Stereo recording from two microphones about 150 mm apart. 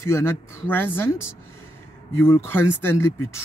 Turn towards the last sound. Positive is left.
turn(degrees=20)  # may be behind; listen again after turning